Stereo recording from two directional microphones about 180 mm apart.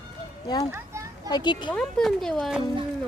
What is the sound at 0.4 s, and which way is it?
Speech, 20° left (ahead or behind).